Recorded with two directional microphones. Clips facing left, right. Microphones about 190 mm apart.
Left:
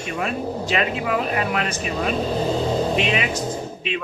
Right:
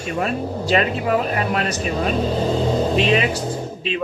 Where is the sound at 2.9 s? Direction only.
35° right (ahead or behind).